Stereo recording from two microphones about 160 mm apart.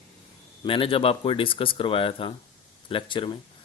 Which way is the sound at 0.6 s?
35° left (ahead or behind).